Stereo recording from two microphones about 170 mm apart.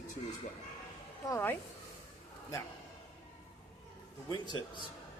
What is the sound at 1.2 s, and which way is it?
Speech, 15° left (ahead or behind).